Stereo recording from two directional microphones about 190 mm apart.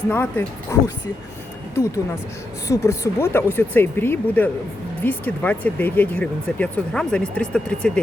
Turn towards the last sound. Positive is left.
turn(degrees=5)  # may be behind; listen again after turning